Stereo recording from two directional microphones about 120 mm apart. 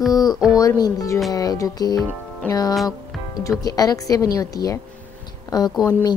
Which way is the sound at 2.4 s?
15° left (ahead or behind).